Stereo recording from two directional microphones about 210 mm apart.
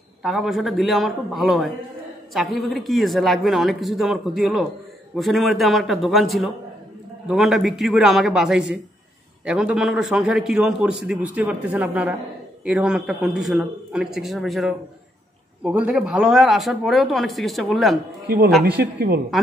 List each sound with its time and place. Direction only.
0.2 s a man's voice: centre (ahead or behind)
18.8 s a woman's voice: 50° right (ahead or behind)